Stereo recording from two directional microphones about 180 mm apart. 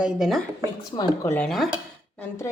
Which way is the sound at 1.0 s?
15° left (ahead or behind).